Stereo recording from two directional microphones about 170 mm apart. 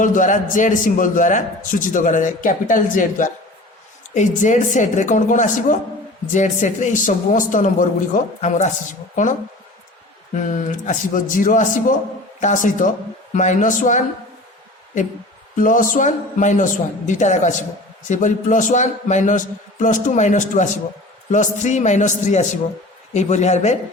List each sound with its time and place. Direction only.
0.0 s a man's voice: 50° left (ahead or behind)
10.3 s a man's voice: 50° left (ahead or behind)
15.5 s a man's voice: 50° left (ahead or behind)